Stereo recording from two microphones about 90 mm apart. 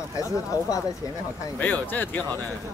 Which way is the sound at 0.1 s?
40° left (ahead or behind).